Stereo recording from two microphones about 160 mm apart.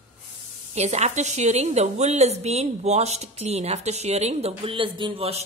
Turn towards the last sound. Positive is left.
turn(degrees=-35)  # may be behind; listen again after turning